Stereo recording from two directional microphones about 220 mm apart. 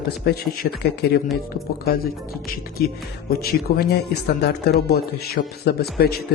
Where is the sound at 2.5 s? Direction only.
45° left (ahead or behind).